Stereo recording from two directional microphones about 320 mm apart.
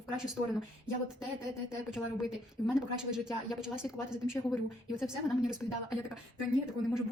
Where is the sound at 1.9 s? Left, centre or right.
Centre.